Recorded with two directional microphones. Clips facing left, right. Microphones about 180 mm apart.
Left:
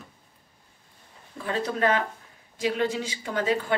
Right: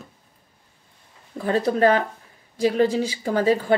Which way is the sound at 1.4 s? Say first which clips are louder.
Right 7 dB; 40° right (ahead or behind).